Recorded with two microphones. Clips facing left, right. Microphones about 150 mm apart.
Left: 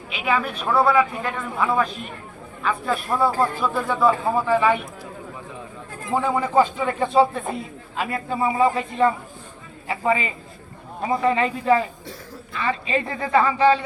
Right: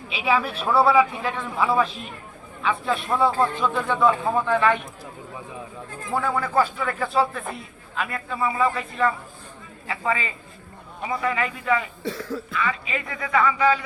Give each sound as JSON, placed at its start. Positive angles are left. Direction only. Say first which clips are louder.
{"t": 0.1, "sound": "a man's voice", "louder": "even", "side_deg": 0}
{"t": 6.1, "sound": "a man's voice", "louder": "left 3 dB", "side_deg": 20}
{"t": 12.0, "sound": "speech", "louder": "right 9 dB", "side_deg": -75}
{"t": 12.5, "sound": "speech", "louder": "left 6 dB", "side_deg": 30}